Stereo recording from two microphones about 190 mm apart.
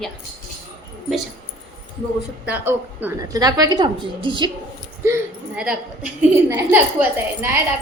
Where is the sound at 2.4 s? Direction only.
10° right (ahead or behind); by 4.5 s 25° right (ahead or behind).